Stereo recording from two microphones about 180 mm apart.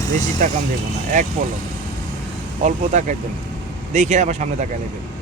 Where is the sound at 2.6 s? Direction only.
40° right (ahead or behind).